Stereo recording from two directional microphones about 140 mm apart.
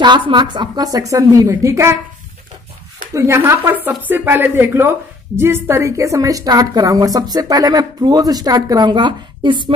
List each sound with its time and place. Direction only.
0.0 s a woman's voice: 35° right (ahead or behind)
3.2 s a woman's voice: 20° right (ahead or behind); by 9.6 s 35° right (ahead or behind)